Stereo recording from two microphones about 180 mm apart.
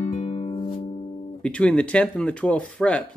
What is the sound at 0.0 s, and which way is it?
Music, 40° left (ahead or behind).